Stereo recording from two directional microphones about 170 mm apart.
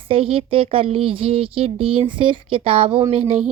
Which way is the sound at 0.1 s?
35° right (ahead or behind).